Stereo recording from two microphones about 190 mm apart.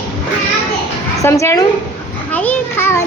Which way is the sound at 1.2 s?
15° left (ahead or behind).